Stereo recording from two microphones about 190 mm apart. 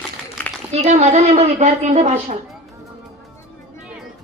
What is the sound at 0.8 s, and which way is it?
Shofar, 35° right (ahead or behind).